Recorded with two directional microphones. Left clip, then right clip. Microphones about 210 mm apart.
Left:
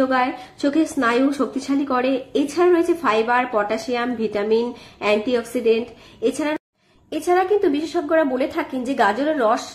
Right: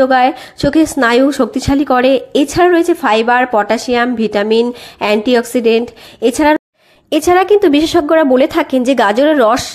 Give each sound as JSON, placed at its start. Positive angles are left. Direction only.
{"t": 0.0, "sound": "a woman's voice", "side_deg": -40}